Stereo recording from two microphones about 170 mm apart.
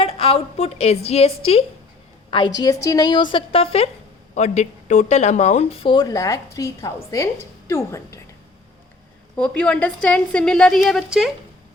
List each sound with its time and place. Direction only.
0.0 s speech: 35° left (ahead or behind)
2.3 s a woman's voice: 25° left (ahead or behind)
9.3 s a woman's voice: 5° left (ahead or behind)